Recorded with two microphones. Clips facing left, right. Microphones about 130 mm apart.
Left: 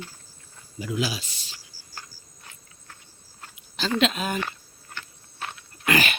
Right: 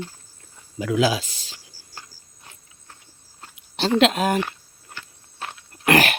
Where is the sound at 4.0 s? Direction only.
75° right (ahead or behind).